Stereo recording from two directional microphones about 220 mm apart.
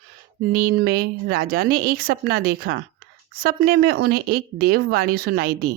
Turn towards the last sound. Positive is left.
turn(degrees=-40)  # may be behind; listen again after turning